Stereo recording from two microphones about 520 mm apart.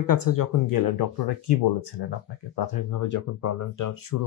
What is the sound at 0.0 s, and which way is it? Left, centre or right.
Speech, left.